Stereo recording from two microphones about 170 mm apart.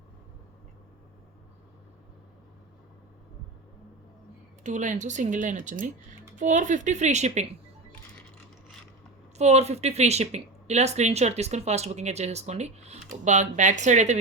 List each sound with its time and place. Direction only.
4.6 s speech: 45° right (ahead or behind)
9.4 s speech: 40° right (ahead or behind)